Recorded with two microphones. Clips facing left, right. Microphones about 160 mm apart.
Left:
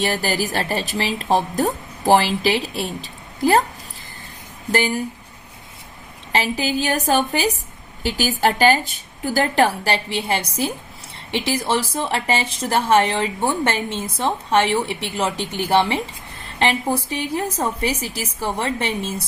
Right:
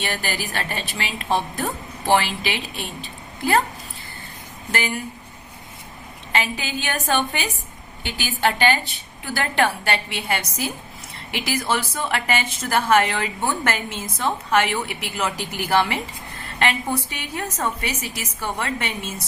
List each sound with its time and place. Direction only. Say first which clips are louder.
0.0 s a woman's voice: left 6 dB; 40° left (ahead or behind)
4.7 s a woman's voice: left 6 dB; 35° left (ahead or behind)
6.3 s a woman's voice: left 5 dB; 35° left (ahead or behind)